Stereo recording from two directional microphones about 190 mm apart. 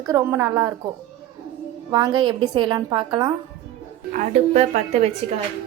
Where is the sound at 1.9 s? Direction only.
25° right (ahead or behind).